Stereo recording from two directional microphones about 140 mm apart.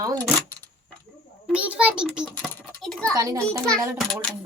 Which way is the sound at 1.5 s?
10° right (ahead or behind).